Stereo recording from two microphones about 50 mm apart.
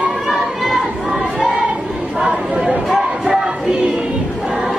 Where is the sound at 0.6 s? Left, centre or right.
Centre.